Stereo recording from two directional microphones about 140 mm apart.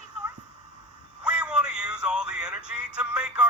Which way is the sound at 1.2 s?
5° right (ahead or behind).